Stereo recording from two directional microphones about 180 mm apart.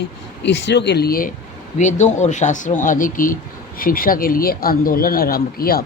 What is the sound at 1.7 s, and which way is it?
Speech, 40° left (ahead or behind).